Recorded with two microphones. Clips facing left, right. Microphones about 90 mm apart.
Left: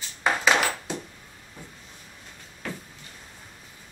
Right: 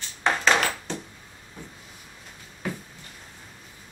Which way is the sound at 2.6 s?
15° right (ahead or behind).